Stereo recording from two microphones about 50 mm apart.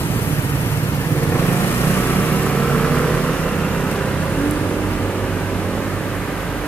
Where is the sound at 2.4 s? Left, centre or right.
Left.